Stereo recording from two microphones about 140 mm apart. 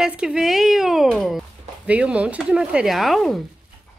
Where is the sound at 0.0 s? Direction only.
5° right (ahead or behind).